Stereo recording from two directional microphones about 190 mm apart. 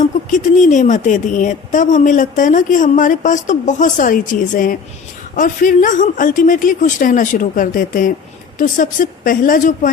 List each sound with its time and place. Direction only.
0.0 s a woman's voice: 40° left (ahead or behind)